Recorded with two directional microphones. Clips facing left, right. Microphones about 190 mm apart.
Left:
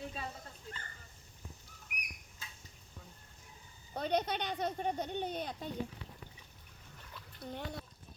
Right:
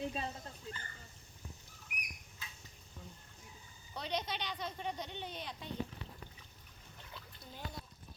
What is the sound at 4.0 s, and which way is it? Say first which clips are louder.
Speech: left 6 dB; 55° left (ahead or behind).